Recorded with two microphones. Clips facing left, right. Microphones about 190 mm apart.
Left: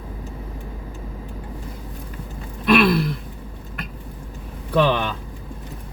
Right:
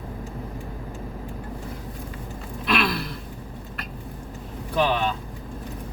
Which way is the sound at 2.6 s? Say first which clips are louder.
Left 8 dB; 55° left (ahead or behind).